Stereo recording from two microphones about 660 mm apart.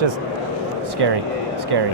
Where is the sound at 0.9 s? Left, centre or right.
Right.